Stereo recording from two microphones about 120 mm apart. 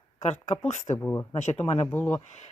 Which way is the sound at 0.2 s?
70° left (ahead or behind).